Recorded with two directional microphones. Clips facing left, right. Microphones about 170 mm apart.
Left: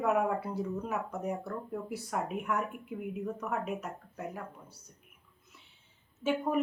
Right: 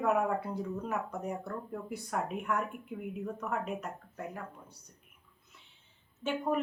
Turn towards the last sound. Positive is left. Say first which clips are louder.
# left 1 dB
turn(degrees=5)  # may be behind; listen again after turning